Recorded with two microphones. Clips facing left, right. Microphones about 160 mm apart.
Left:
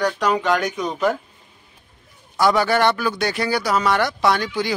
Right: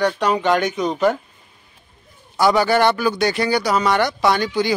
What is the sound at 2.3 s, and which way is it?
Speech, centre (ahead or behind).